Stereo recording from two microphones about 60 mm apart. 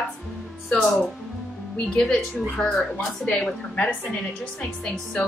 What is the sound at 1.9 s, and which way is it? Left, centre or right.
A woman's voice, centre.